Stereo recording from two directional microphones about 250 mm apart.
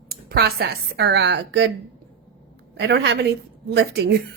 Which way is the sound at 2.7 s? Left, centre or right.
Right.